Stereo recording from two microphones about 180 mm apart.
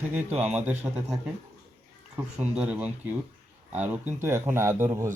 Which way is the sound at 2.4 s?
5° right (ahead or behind).